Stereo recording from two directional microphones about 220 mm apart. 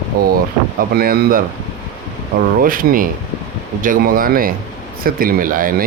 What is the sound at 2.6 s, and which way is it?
Speech, 40° right (ahead or behind).